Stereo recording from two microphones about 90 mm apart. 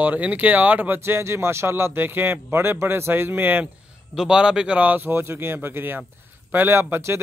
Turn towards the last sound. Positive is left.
turn(degrees=-25)  # may be behind; listen again after turning